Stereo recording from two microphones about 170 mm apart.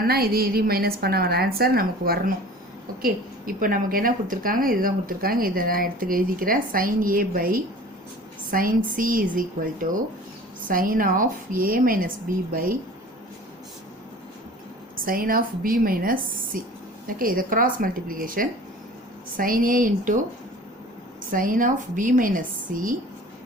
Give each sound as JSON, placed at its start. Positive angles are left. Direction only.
{"t": 0.0, "sound": "a woman's voice", "side_deg": -65}
{"t": 14.9, "sound": "a woman's voice", "side_deg": -55}
{"t": 21.2, "sound": "a woman's voice", "side_deg": -55}